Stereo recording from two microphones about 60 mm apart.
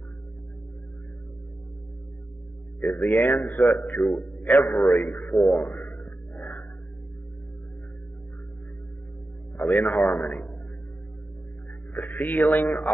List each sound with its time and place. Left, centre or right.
2.8 s speech: centre
4.1 s a man's voice: left
4.5 s speech: centre
5.6 s a sound: left
9.7 s speech: centre
11.9 s speech: left